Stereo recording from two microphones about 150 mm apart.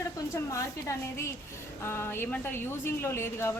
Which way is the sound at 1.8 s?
15° left (ahead or behind).